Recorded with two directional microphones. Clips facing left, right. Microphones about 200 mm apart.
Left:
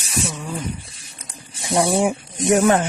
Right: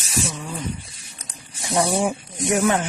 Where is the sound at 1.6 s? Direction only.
25° left (ahead or behind).